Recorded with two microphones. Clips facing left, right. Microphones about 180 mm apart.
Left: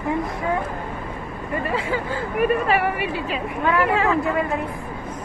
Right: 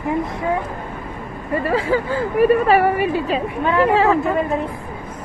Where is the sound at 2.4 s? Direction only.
40° right (ahead or behind).